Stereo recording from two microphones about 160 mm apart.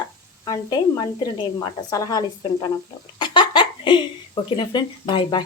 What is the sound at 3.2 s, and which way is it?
Giggle, 30° left (ahead or behind).